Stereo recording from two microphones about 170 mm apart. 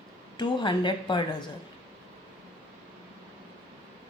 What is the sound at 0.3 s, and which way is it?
A woman's voice, 30° left (ahead or behind).